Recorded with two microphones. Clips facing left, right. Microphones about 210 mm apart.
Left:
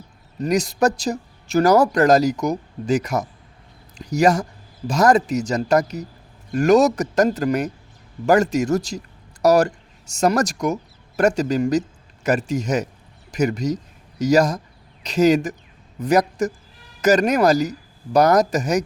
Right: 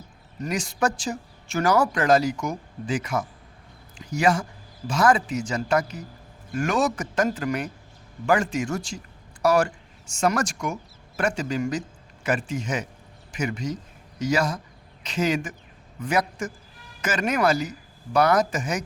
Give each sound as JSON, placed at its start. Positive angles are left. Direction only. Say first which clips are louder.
{"t": 0.4, "sound": "speech", "louder": "left 7 dB", "side_deg": 40}